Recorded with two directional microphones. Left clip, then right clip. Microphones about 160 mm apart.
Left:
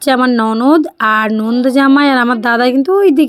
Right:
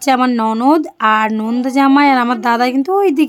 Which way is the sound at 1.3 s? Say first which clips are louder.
Left 3 dB; 10° left (ahead or behind).